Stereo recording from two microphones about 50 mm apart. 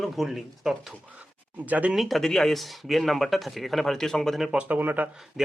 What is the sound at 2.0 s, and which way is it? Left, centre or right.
Speech, centre.